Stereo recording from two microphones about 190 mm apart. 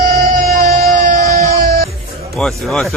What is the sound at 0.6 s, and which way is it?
Music, 50° right (ahead or behind).